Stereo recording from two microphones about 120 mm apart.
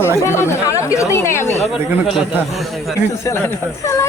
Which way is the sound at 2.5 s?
Centre (ahead or behind).